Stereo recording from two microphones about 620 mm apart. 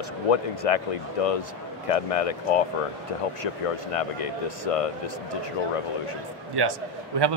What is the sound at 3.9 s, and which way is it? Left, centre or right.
Speech, left.